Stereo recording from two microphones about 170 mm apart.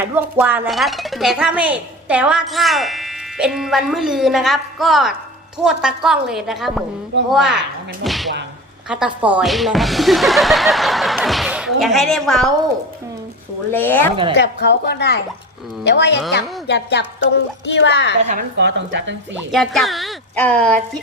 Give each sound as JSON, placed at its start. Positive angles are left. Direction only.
{"t": 0.0, "sound": "speech", "side_deg": -10}
{"t": 13.7, "sound": "speech", "side_deg": 10}
{"t": 14.3, "sound": "a woman's voice", "side_deg": 85}
{"t": 15.8, "sound": "a woman's voice", "side_deg": 90}
{"t": 18.2, "sound": "a woman's voice", "side_deg": -40}
{"t": 18.5, "sound": "speech", "side_deg": -90}
{"t": 19.5, "sound": "speech", "side_deg": 0}